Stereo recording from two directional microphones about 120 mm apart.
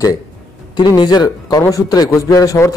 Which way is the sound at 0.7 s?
40° left (ahead or behind).